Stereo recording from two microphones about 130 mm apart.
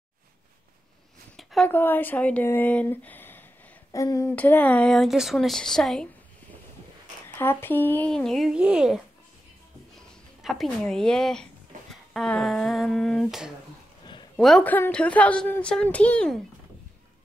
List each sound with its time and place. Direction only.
1.3 s a sound: 5° left (ahead or behind)
1.7 s speech: 15° left (ahead or behind)
3.9 s a sound: 25° left (ahead or behind)
4.4 s a woman's voice: 15° left (ahead or behind)
7.3 s speech: 15° left (ahead or behind)
8.1 s a woman's voice: 5° left (ahead or behind)
10.4 s a woman's voice: centre (ahead or behind)